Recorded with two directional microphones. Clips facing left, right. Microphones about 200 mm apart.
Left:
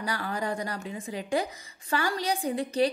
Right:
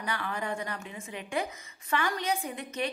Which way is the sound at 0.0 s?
35° left (ahead or behind).